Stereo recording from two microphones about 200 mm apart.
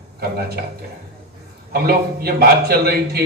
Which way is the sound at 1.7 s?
50° right (ahead or behind).